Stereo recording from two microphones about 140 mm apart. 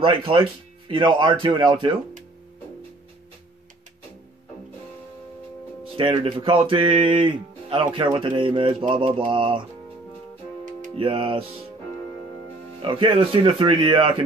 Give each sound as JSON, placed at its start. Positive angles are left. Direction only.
{"t": 0.0, "sound": "speech", "side_deg": -40}
{"t": 5.9, "sound": "speech", "side_deg": -40}
{"t": 11.0, "sound": "speech", "side_deg": -40}
{"t": 12.8, "sound": "speech", "side_deg": -40}